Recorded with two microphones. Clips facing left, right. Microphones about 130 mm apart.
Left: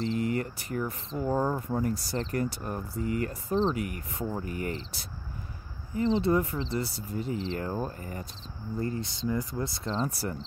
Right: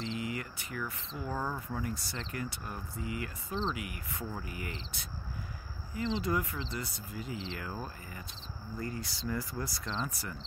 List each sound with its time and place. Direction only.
0.0 s speech: 40° left (ahead or behind)
8.7 s speech: 30° left (ahead or behind)
9.8 s speech: 35° left (ahead or behind)